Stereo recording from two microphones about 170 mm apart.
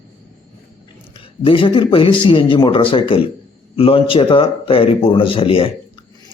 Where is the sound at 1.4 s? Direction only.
30° left (ahead or behind).